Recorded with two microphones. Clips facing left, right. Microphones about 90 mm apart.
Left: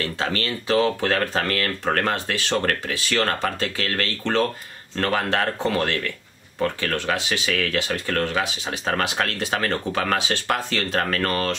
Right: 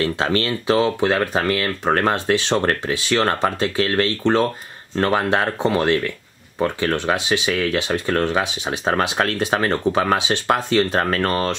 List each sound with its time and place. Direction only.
0.0 s speech: 30° right (ahead or behind)